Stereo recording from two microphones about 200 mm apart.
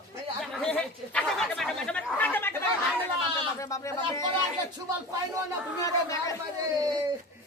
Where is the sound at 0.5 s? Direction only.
5° left (ahead or behind).